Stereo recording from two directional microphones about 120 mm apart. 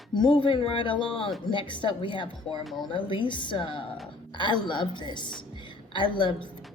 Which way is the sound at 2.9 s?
40° left (ahead or behind).